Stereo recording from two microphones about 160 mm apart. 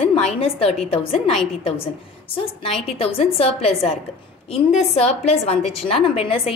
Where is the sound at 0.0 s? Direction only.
40° left (ahead or behind).